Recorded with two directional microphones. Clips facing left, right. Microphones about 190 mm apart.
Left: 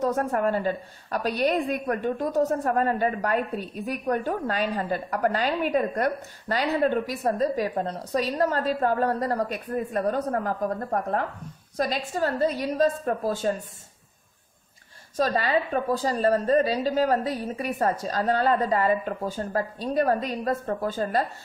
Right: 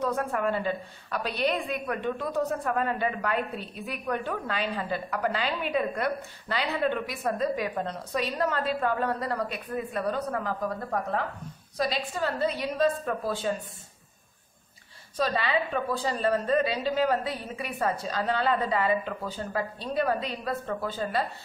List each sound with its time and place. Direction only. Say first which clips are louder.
0.0 s a woman's voice: left 4 dB; 40° left (ahead or behind)
15.1 s a woman's voice: left 3 dB; 45° left (ahead or behind)